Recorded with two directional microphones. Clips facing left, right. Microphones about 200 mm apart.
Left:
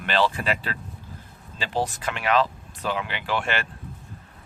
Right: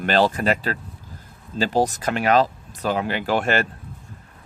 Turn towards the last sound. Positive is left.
turn(degrees=-40)  # may be behind; listen again after turning